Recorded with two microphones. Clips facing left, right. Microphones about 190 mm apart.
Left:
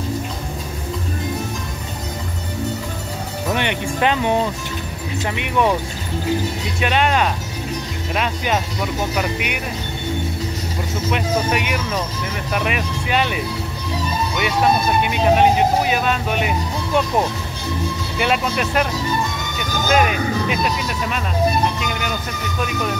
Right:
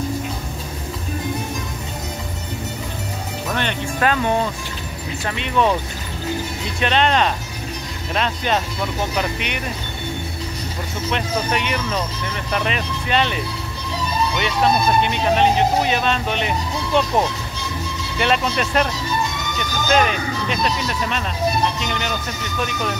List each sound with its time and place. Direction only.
3.5 s speech: 15° left (ahead or behind)
6.8 s speech: 10° left (ahead or behind)
11.1 s speech: 10° left (ahead or behind)
14.4 s speech: 10° left (ahead or behind)
18.1 s speech: 5° left (ahead or behind)
19.9 s speech: 5° left (ahead or behind)